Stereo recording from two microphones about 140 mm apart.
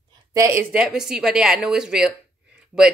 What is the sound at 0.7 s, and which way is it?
Speech, 5° right (ahead or behind).